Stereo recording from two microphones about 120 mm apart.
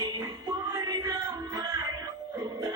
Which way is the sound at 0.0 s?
30° right (ahead or behind).